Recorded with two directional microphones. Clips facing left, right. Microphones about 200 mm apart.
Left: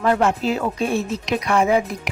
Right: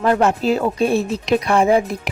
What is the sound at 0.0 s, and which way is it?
Speech, 40° right (ahead or behind).